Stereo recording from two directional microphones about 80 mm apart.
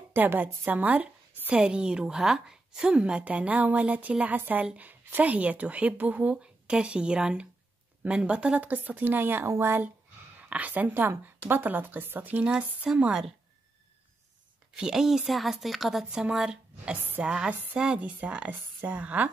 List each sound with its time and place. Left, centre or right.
0.1 s a woman's voice: right
1.5 s a woman's voice: centre; by 9.8 s right
10.5 s a woman's voice: centre
12.4 s a woman's voice: centre
14.8 s a woman's voice: centre